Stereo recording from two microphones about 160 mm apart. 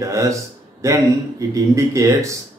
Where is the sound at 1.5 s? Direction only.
20° right (ahead or behind).